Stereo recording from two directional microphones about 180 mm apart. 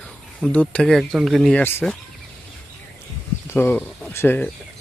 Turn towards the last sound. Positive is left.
turn(degrees=10)  # may be behind; listen again after turning